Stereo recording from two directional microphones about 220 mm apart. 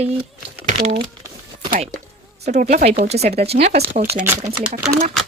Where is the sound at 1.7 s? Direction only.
40° right (ahead or behind).